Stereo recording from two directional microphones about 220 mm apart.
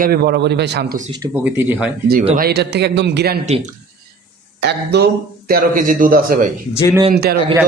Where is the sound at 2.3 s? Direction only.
45° right (ahead or behind).